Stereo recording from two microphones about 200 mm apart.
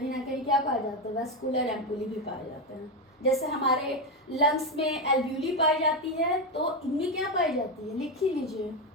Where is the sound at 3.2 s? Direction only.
30° left (ahead or behind).